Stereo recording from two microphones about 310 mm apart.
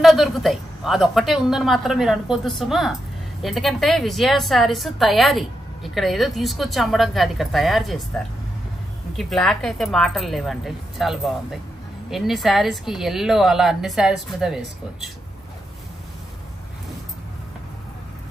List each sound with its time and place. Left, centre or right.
0.0 s speech: centre
9.1 s speech: centre